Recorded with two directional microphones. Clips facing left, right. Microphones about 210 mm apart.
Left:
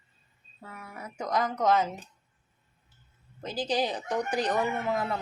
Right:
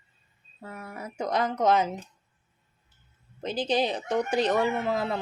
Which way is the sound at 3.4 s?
20° right (ahead or behind).